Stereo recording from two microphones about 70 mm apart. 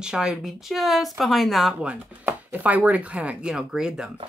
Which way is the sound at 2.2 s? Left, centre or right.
Right.